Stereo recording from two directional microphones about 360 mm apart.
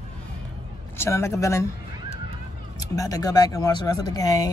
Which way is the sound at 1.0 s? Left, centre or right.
Centre.